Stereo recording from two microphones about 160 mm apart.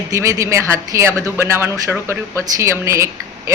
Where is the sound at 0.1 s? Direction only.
20° right (ahead or behind).